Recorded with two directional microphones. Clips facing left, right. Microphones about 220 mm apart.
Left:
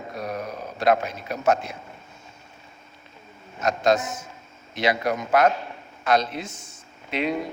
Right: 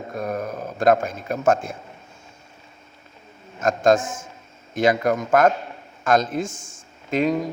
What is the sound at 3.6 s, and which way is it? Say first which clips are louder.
A man's voice: right 3 dB; 50° right (ahead or behind).